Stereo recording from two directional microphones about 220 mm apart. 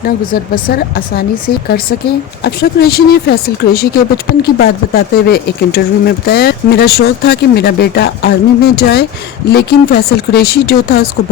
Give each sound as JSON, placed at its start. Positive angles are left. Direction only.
{"t": 0.0, "sound": "speech", "side_deg": 40}